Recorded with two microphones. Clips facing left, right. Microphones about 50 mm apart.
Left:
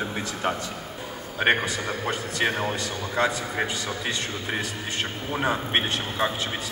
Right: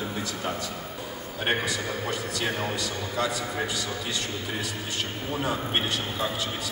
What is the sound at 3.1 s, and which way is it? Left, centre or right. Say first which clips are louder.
Speech: left 4 dB; left.